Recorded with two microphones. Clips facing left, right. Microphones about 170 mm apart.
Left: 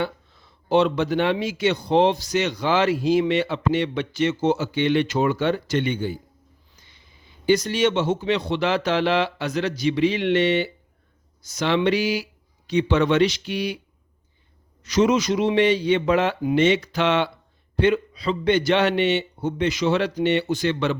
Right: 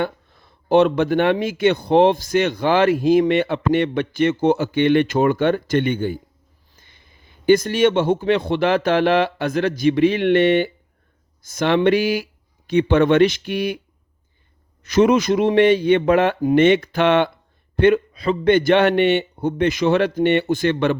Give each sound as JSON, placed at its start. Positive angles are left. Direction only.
{"t": 0.0, "sound": "speech", "side_deg": -55}
{"t": 14.8, "sound": "speech", "side_deg": -55}
{"t": 16.4, "sound": "speech", "side_deg": -40}
{"t": 16.6, "sound": "speech", "side_deg": -55}